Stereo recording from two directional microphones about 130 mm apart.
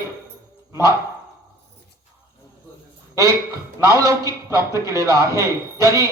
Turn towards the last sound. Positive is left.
turn(degrees=-25)  # may be behind; listen again after turning